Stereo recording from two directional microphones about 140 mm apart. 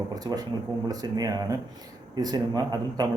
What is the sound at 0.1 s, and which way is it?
A man's voice, 25° right (ahead or behind).